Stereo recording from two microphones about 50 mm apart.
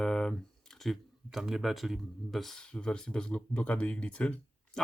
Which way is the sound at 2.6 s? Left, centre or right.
Centre.